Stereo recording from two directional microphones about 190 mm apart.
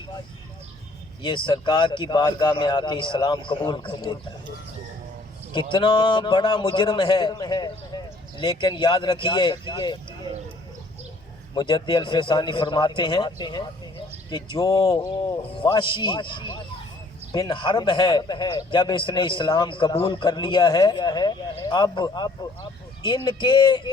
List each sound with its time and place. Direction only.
1.2 s a man's voice: 25° left (ahead or behind)
5.5 s a man's voice: 25° left (ahead or behind)
11.5 s a man's voice: 25° left (ahead or behind)